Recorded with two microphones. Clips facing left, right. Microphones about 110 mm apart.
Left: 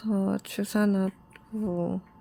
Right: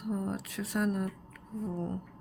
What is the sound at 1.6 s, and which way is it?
Speech, 90° left.